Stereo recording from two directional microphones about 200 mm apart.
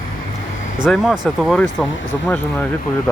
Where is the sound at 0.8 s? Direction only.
Centre (ahead or behind).